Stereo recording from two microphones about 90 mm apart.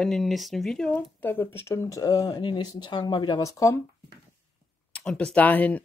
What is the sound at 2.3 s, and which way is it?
Speech, 55° left (ahead or behind).